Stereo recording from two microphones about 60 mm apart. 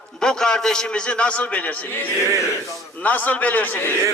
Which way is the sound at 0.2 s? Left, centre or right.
Centre.